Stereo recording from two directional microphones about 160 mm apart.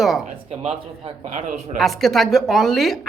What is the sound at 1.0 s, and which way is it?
Speech, 45° right (ahead or behind).